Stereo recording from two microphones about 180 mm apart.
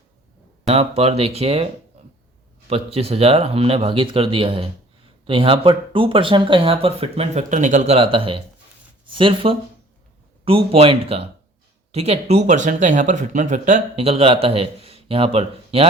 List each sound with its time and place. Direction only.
0.6 s speech: 35° right (ahead or behind)